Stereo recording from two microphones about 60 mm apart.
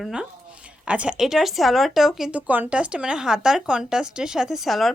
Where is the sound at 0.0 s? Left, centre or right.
Centre.